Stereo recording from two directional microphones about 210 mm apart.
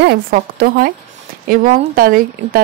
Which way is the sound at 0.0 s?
50° right (ahead or behind).